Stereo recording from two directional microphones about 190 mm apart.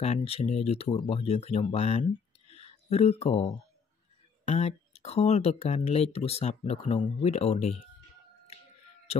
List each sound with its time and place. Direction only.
0.0 s speech: 35° left (ahead or behind)